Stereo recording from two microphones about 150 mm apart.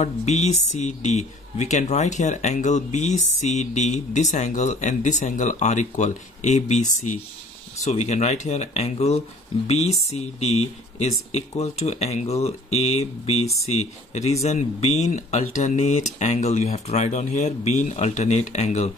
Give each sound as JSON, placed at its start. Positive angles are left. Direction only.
{"t": 0.0, "sound": "speech", "side_deg": 50}